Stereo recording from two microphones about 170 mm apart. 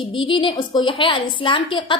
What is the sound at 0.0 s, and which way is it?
A woman's voice, 30° left (ahead or behind).